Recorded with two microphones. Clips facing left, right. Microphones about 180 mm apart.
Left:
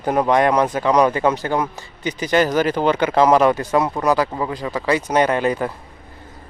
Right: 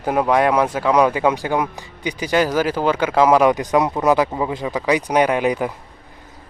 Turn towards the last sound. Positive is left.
turn(degrees=-10)  # may be behind; listen again after turning